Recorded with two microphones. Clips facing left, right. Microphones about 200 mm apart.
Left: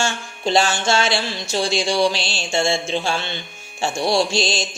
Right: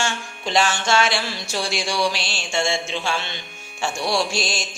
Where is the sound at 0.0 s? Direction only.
30° left (ahead or behind).